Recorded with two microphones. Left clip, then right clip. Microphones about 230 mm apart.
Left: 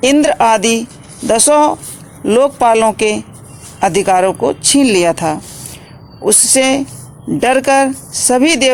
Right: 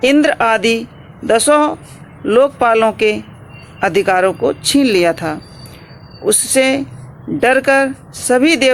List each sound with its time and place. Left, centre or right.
0.0 s speech: left
6.4 s speech: left